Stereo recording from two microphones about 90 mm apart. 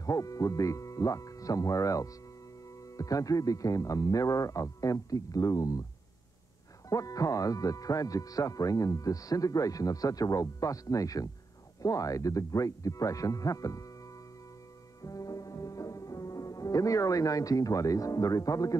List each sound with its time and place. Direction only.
0.0 s speech: 40° left (ahead or behind)
6.9 s speech: 40° left (ahead or behind)
15.0 s music: 40° left (ahead or behind)